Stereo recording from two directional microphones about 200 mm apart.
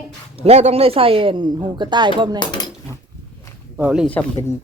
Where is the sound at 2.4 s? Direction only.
20° left (ahead or behind).